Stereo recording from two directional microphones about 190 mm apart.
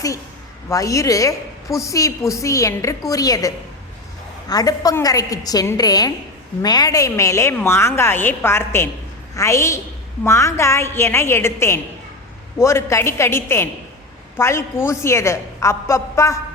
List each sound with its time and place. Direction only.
0.7 s a woman's voice: 15° left (ahead or behind)